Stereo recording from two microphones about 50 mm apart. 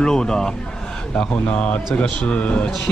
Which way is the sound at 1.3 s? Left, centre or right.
Left.